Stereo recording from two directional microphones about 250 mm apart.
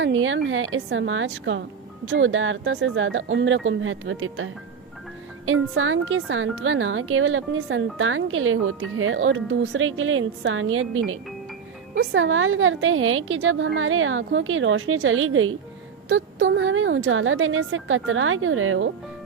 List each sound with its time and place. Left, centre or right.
0.0 s a woman's voice: right